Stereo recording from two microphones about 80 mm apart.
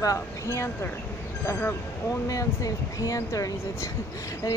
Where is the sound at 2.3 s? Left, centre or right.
Left.